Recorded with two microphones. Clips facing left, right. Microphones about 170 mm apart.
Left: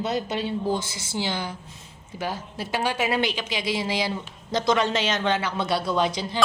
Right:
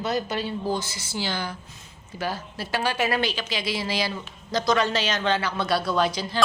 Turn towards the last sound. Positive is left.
turn(degrees=20)  # may be behind; listen again after turning